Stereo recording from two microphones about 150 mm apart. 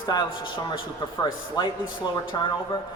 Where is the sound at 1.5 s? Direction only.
30° left (ahead or behind).